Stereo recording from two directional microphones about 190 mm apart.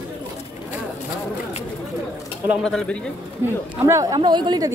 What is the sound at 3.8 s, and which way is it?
Speech, 15° right (ahead or behind).